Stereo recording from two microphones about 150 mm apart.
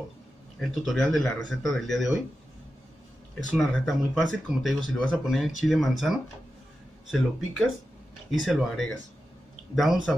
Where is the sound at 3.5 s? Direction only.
Centre (ahead or behind).